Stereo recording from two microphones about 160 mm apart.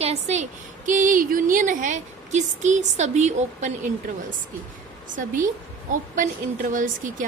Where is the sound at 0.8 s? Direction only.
55° right (ahead or behind).